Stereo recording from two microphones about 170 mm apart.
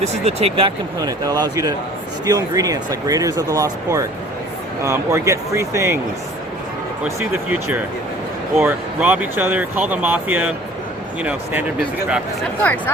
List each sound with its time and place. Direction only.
0.0 s speech: 40° right (ahead or behind)
0.9 s speech: 20° right (ahead or behind)
7.0 s speech: 10° right (ahead or behind)
12.6 s speech: 10° left (ahead or behind)